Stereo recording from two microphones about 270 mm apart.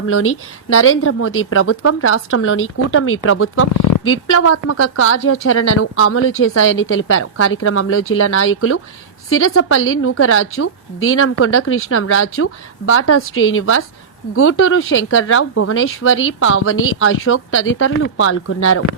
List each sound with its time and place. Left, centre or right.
0.1 s a woman's voice: left